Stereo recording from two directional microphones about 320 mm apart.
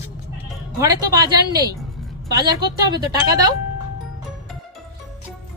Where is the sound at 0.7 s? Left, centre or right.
Centre.